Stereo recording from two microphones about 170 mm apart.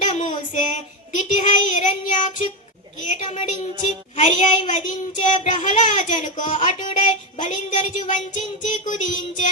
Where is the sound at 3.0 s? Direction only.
45° left (ahead or behind).